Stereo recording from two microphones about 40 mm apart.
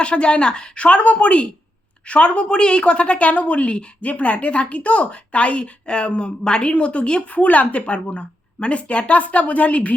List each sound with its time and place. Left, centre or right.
0.0 s a woman's voice: left